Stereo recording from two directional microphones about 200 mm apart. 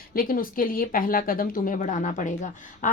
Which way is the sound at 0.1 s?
45° left (ahead or behind).